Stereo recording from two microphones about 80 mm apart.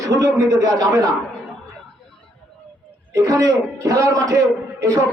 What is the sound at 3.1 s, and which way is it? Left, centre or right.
A man's voice, right.